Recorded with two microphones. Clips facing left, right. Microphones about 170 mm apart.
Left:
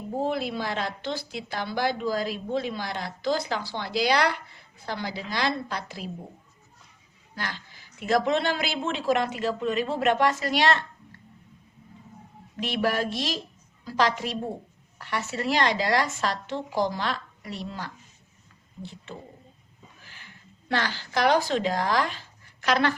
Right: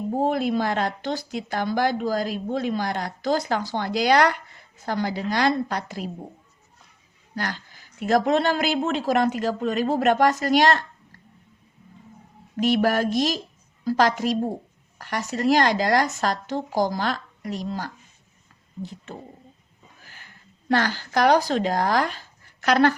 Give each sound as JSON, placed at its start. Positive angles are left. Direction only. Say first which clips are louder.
{"t": 0.2, "sound": "speech", "louder": "right 5 dB", "side_deg": -45}
{"t": 7.3, "sound": "speech", "louder": "right 5 dB", "side_deg": -45}
{"t": 12.5, "sound": "a woman's voice", "louder": "right 6 dB", "side_deg": -45}